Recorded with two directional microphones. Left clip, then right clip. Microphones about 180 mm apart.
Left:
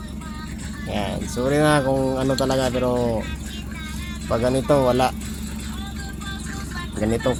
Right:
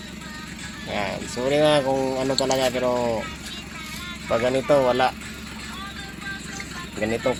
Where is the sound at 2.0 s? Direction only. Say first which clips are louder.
Left 1 dB; 20° left (ahead or behind).